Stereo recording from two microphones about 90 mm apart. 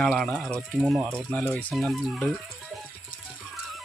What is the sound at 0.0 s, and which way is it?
Speech, 5° left (ahead or behind).